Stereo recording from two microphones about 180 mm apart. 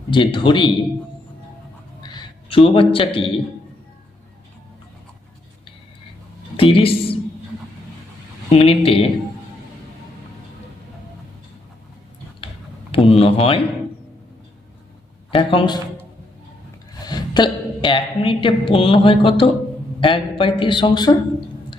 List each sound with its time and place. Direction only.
0.1 s speech: 25° left (ahead or behind)
2.0 s a man's voice: 25° left (ahead or behind)
6.6 s a woman's voice: 30° left (ahead or behind)
8.5 s speech: 35° left (ahead or behind)
12.9 s a sound: 30° left (ahead or behind)
15.4 s speech: 30° left (ahead or behind)
17.0 s a woman's voice: 25° left (ahead or behind)